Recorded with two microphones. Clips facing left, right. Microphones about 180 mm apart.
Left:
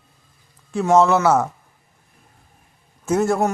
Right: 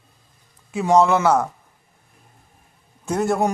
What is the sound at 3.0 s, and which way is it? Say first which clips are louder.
Speech: left 2 dB; centre (ahead or behind).